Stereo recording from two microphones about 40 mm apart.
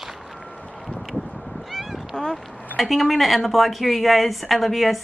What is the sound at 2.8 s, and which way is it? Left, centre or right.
Speech, centre.